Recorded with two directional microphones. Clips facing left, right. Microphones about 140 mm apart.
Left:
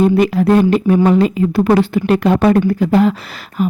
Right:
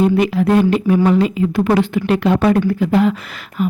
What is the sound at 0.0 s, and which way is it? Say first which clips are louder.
A woman's voice: left 2 dB; 40° left (ahead or behind).